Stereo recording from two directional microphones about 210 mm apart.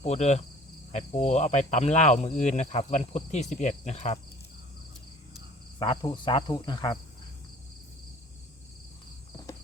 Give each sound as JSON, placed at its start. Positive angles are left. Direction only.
{"t": 0.0, "sound": "cricket", "side_deg": 30}
{"t": 5.8, "sound": "cricket", "side_deg": 20}